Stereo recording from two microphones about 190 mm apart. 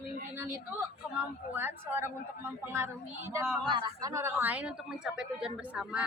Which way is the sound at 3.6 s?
25° right (ahead or behind).